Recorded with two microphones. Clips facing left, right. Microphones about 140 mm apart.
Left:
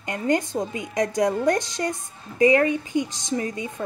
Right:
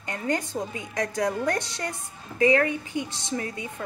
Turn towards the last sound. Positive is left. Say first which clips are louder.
# left 4 dB
turn(degrees=20)  # may be behind; listen again after turning